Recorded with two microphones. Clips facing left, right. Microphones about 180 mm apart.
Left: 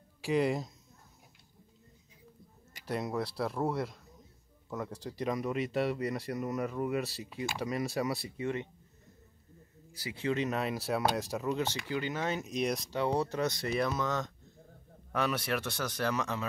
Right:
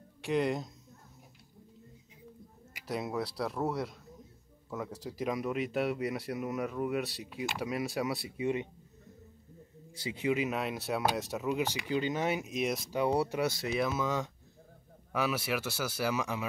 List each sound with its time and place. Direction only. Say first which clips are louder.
0.2 s speech: left 1 dB; centre (ahead or behind)
2.7 s speech: left 1 dB; centre (ahead or behind)
8.4 s speech: right 5 dB; 15° right (ahead or behind)
9.9 s speech: right 3 dB; 25° right (ahead or behind)
10.2 s speech: even; 5° right (ahead or behind)